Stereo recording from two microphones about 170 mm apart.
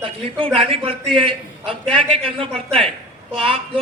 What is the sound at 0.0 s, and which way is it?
A man's voice, 30° right (ahead or behind).